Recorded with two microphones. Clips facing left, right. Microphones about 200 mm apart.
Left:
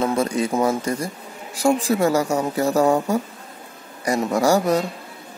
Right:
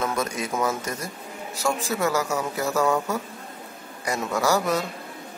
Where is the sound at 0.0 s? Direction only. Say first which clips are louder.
Left 6 dB; 30° left (ahead or behind).